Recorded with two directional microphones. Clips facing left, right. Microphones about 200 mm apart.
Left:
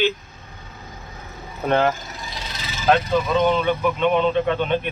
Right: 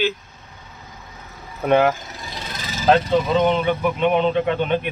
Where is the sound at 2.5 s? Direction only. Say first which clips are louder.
Right 4 dB; 45° right (ahead or behind).